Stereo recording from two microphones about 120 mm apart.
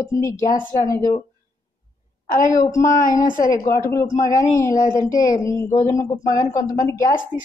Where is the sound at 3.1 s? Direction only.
25° left (ahead or behind).